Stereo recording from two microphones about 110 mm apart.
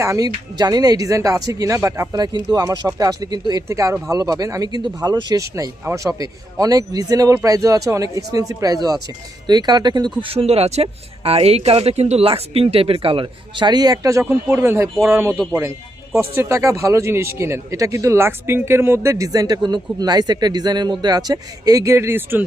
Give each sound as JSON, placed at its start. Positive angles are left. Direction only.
{"t": 0.0, "sound": "speech", "side_deg": -30}
{"t": 21.9, "sound": "speech", "side_deg": -20}